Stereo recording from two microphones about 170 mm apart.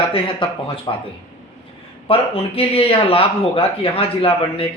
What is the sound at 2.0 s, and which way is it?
A man's voice, 35° left (ahead or behind).